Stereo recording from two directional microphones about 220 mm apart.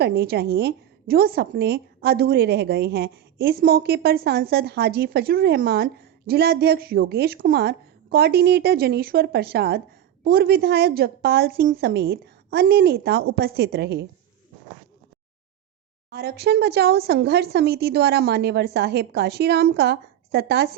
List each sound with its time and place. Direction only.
0.0 s a woman's voice: 45° right (ahead or behind)
16.0 s a woman's voice: 45° right (ahead or behind)